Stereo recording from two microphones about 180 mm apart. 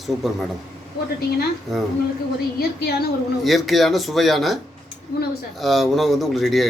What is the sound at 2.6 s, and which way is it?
Speech, 60° left (ahead or behind).